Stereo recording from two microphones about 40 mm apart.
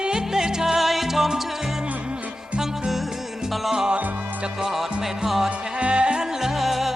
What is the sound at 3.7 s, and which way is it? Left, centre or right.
Music, centre.